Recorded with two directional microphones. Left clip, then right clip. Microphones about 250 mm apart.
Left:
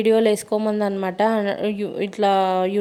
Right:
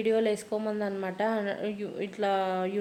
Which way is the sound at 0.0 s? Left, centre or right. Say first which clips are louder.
Left 9 dB; left.